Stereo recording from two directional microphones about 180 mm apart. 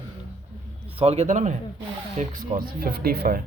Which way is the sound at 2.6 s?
60° right (ahead or behind).